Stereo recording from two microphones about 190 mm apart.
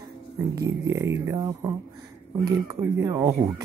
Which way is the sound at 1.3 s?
20° right (ahead or behind).